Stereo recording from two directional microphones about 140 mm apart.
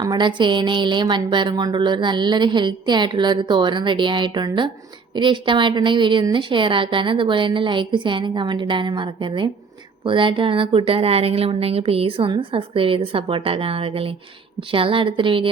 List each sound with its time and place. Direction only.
0.0 s a woman's voice: 30° right (ahead or behind)